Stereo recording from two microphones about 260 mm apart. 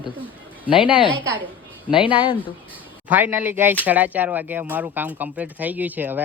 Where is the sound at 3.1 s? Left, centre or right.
Centre.